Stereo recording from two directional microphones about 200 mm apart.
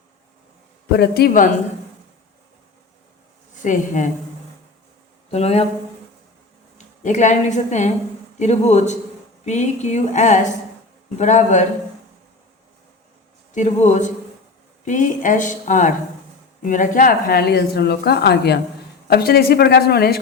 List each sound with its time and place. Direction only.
0.9 s a woman's voice: 55° left (ahead or behind)
3.5 s speech: 40° left (ahead or behind)
5.3 s a woman's voice: 30° left (ahead or behind)
6.7 s a woman's voice: 35° left (ahead or behind)
13.5 s a woman's voice: 35° left (ahead or behind); by 20.1 s 55° left (ahead or behind)